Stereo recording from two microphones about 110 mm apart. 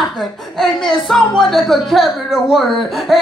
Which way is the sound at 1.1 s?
5° left (ahead or behind).